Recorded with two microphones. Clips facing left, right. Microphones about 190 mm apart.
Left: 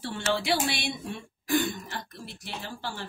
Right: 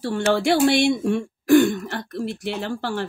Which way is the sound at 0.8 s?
75° right (ahead or behind).